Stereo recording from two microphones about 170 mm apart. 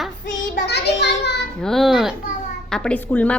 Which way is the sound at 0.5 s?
75° left (ahead or behind).